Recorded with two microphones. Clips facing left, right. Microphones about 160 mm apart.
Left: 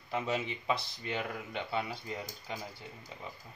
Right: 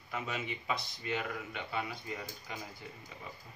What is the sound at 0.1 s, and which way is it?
Speech, 30° left (ahead or behind).